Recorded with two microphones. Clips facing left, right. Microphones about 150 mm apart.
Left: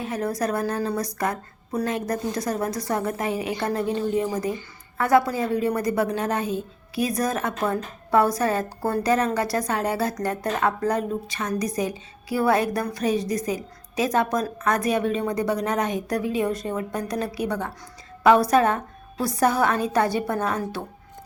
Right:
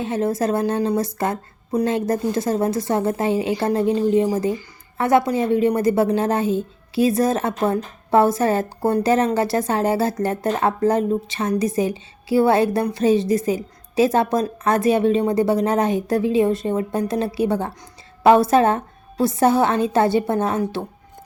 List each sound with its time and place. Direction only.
0.0 s a woman's voice: 25° right (ahead or behind)